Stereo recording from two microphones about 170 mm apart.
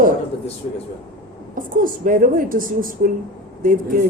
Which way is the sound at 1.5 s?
55° right (ahead or behind).